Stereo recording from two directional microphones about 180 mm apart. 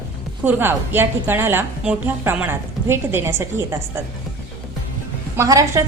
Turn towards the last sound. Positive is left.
turn(degrees=-15)  # may be behind; listen again after turning